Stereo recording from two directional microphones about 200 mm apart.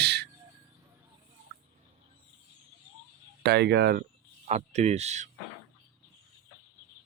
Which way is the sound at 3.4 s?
55° right (ahead or behind).